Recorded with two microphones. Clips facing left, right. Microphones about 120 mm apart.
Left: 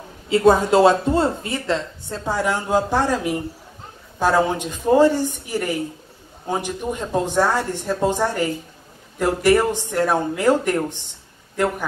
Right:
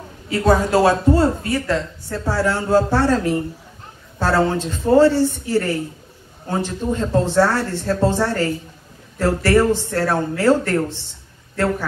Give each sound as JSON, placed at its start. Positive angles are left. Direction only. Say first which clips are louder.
{"t": 0.3, "sound": "speech", "louder": "left 2 dB", "side_deg": 20}